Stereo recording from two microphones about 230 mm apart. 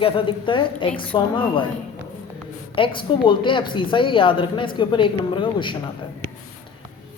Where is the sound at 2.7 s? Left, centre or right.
Left.